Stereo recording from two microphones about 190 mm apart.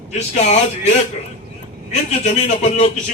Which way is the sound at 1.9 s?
35° left (ahead or behind).